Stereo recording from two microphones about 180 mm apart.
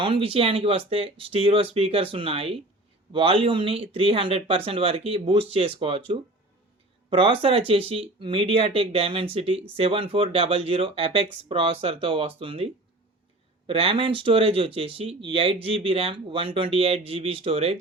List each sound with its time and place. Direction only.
0.0 s speech: 30° right (ahead or behind)
13.7 s speech: 30° right (ahead or behind)